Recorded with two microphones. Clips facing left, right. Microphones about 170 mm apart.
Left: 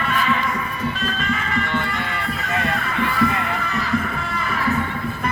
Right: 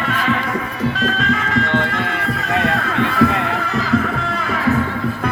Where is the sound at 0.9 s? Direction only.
85° right.